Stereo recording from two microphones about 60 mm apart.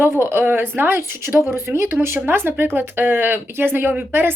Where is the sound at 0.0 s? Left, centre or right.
Right.